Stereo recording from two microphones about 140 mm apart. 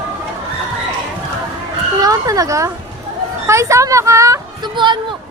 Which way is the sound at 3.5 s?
20° right (ahead or behind).